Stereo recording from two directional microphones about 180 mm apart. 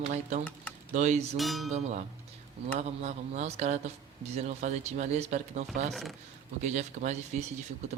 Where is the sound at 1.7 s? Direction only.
40° right (ahead or behind).